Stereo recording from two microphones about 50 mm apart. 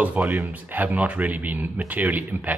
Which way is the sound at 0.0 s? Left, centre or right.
Right.